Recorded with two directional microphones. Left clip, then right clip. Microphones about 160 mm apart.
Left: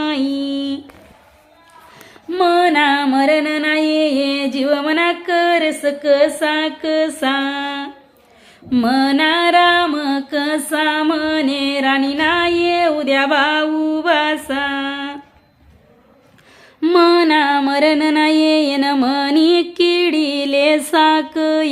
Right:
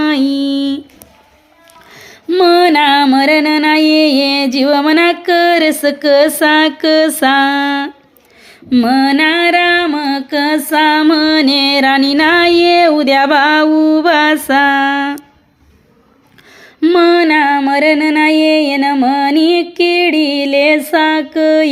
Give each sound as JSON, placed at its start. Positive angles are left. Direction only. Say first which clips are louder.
{"t": 0.0, "sound": "music", "louder": "right 6 dB", "side_deg": -30}
{"t": 1.9, "sound": "music", "louder": "right 9 dB", "side_deg": -40}
{"t": 8.7, "sound": "female singing", "louder": "right 5 dB", "side_deg": -20}
{"t": 9.7, "sound": "music", "louder": "right 3 dB", "side_deg": -25}
{"t": 16.8, "sound": "a sound", "louder": "right 3 dB", "side_deg": -15}